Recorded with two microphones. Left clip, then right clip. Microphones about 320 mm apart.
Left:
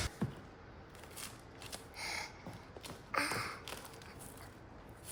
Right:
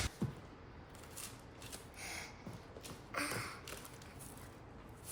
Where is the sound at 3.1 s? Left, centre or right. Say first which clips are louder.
Left 5 dB; left.